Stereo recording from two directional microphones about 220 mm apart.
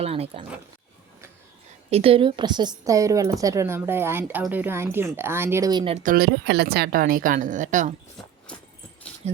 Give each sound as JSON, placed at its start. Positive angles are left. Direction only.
{"t": 0.0, "sound": "speech", "side_deg": -25}
{"t": 1.9, "sound": "a woman's voice", "side_deg": -25}
{"t": 6.0, "sound": "a woman's voice", "side_deg": -40}